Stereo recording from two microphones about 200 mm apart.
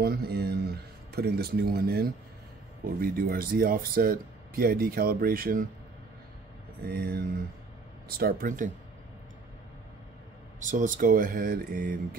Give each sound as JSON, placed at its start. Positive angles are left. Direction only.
{"t": 0.0, "sound": "speech", "side_deg": -50}
{"t": 6.9, "sound": "speech", "side_deg": -50}
{"t": 10.6, "sound": "speech", "side_deg": -40}